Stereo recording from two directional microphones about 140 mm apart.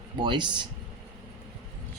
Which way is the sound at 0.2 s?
35° right (ahead or behind).